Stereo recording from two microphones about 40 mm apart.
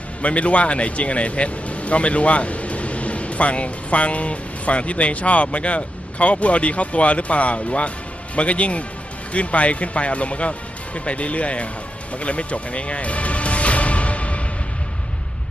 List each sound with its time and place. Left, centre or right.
0.2 s speech: left
12.1 s music: left